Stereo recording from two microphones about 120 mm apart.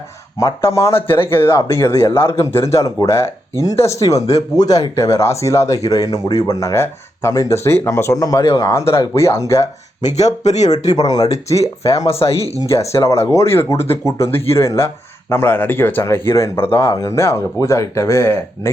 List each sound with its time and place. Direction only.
0.3 s speech: 25° left (ahead or behind)
10.0 s speech: 75° left (ahead or behind)
10.9 s speech: 30° left (ahead or behind)
11.5 s speech: 60° left (ahead or behind)
12.5 s speech: 25° left (ahead or behind)